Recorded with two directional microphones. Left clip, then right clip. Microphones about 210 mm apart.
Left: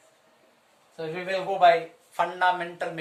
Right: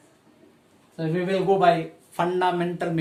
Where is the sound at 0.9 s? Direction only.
15° right (ahead or behind).